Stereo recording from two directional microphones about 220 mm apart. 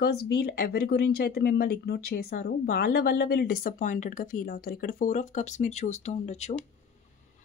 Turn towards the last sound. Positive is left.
turn(degrees=30)  # may be behind; listen again after turning